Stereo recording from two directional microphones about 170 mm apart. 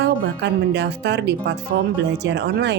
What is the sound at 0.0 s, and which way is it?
A woman's voice, 90° right.